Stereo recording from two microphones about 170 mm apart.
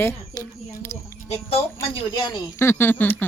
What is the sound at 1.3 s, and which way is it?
Speech, 35° left (ahead or behind).